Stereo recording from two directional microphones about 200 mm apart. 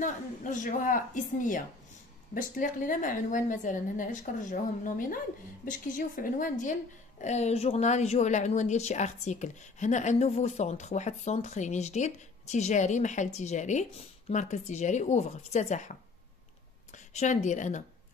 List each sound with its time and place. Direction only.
0.0 s a woman's voice: 40° left (ahead or behind)
2.6 s a woman's voice: 40° left (ahead or behind)